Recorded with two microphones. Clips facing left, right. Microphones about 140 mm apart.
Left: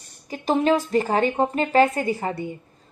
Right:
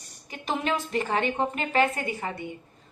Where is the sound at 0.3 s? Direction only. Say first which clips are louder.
Left 9 dB; 35° left (ahead or behind).